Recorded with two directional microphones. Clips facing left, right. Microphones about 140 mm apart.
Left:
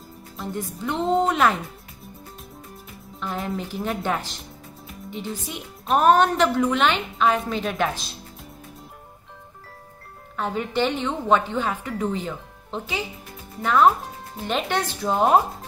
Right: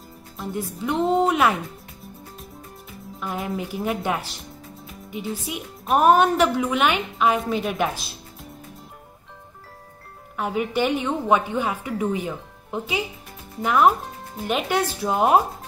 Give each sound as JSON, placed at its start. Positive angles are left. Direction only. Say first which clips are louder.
{"t": 0.4, "sound": "a woman's voice", "louder": "right 1 dB", "side_deg": 0}
{"t": 3.2, "sound": "a woman's voice", "louder": "even", "side_deg": 0}
{"t": 10.3, "sound": "speech", "louder": "right 1 dB", "side_deg": -10}
{"t": 14.3, "sound": "speech", "louder": "right 1 dB", "side_deg": -5}